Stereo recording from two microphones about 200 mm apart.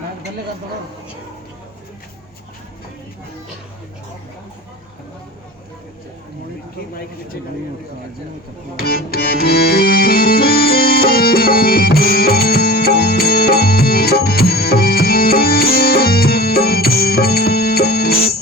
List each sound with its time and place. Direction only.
8.7 s music: 50° left (ahead or behind)